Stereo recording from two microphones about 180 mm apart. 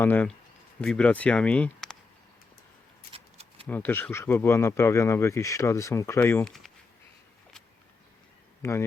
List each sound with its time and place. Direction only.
0.0 s speech: 10° left (ahead or behind)
3.1 s a sound: 30° right (ahead or behind)
3.7 s speech: 10° left (ahead or behind)
8.6 s speech: 15° left (ahead or behind)